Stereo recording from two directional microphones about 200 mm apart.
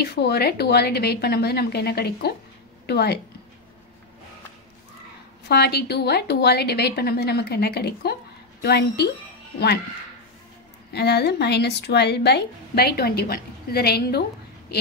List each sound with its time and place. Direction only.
0.0 s a woman's voice: 55° left (ahead or behind)
5.5 s a woman's voice: 55° left (ahead or behind)
10.9 s a woman's voice: 55° left (ahead or behind)